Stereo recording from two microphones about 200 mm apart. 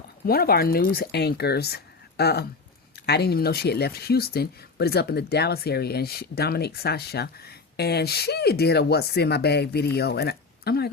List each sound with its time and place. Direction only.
0.3 s speech: 50° left (ahead or behind)